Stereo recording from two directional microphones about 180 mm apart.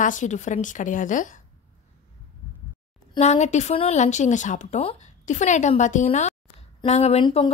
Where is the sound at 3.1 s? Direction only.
40° left (ahead or behind).